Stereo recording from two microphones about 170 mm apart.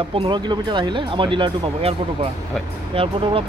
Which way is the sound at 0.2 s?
25° right (ahead or behind).